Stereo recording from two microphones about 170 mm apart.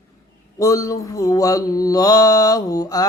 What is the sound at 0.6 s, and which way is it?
Mantra, 20° left (ahead or behind).